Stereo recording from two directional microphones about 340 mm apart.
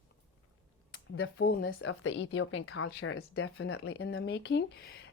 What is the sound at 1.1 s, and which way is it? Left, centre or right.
Speech, left.